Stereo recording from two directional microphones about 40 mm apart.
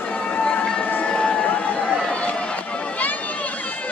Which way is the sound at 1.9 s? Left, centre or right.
Centre.